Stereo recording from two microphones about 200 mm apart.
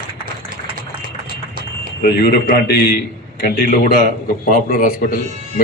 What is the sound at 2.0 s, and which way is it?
A man's voice, 55° left (ahead or behind).